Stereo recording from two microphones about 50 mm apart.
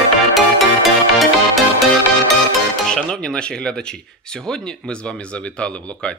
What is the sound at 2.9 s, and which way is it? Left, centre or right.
Speech, centre.